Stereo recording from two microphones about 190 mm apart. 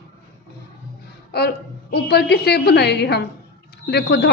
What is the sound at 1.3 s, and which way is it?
A woman's voice, 55° left (ahead or behind).